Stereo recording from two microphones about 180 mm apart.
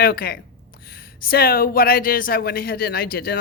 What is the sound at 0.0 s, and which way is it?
Speech, 55° left (ahead or behind).